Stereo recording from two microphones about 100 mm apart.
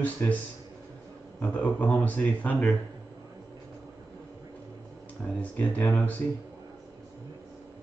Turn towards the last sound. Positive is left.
turn(degrees=15)  # may be behind; listen again after turning